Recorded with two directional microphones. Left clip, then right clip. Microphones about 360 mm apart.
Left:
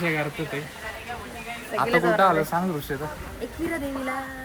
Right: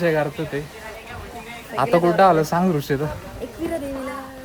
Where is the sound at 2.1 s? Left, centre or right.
Right.